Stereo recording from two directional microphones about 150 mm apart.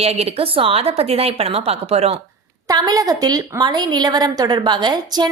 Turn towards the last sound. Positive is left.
turn(degrees=-30)  # may be behind; listen again after turning